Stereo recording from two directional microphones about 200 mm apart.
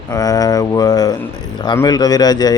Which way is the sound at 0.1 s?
15° left (ahead or behind).